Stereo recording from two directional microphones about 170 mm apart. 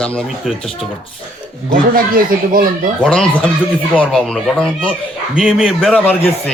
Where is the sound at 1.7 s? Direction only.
55° right (ahead or behind).